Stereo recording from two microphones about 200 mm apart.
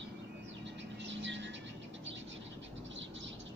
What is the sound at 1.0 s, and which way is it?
Vehicle, 65° right (ahead or behind).